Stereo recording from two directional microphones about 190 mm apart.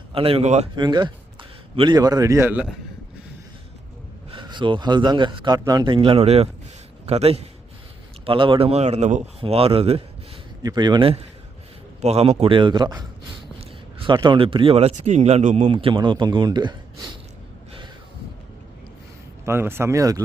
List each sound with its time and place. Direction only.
0.1 s speech: 30° right (ahead or behind)
0.8 s a man's voice: 25° right (ahead or behind); by 2.7 s 10° right (ahead or behind)
4.3 s a man's voice: 25° right (ahead or behind)
10.6 s a man's voice: 20° right (ahead or behind)
19.5 s speech: 10° right (ahead or behind)